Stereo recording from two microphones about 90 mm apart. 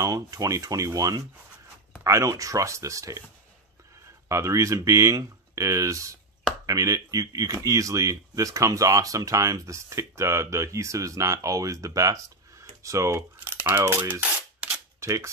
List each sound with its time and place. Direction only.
0.0 s speech: 45° right (ahead or behind)
4.3 s speech: 35° right (ahead or behind)
13.4 s speech: 20° right (ahead or behind)
15.0 s cap gun: 35° right (ahead or behind)